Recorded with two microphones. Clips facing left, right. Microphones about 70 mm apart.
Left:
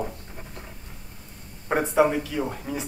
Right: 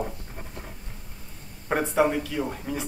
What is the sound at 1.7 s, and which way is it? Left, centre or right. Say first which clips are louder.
Speech: left 2 dB; centre.